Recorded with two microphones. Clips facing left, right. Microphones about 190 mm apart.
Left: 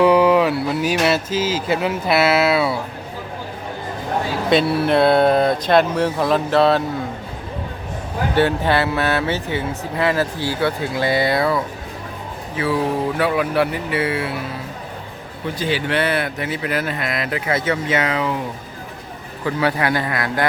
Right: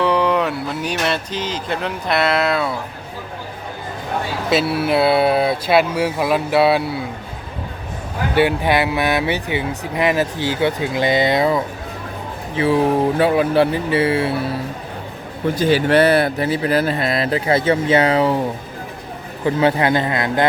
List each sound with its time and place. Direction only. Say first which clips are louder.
0.0 s speech: left 4 dB; 5° left (ahead or behind)
4.4 s speech: left 1 dB; 5° right (ahead or behind)
8.4 s speech: right 1 dB; 15° right (ahead or behind)
15.4 s speech: right 6 dB; 45° right (ahead or behind)
19.5 s speech: right 4 dB; 25° right (ahead or behind)